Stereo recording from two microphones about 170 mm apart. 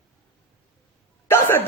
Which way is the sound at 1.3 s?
10° left (ahead or behind).